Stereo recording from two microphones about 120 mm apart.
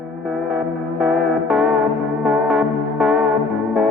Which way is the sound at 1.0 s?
10° right (ahead or behind).